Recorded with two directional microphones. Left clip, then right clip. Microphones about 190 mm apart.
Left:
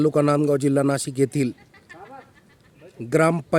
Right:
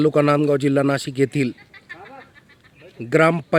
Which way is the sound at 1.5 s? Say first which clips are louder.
Right 5 dB; 20° left (ahead or behind).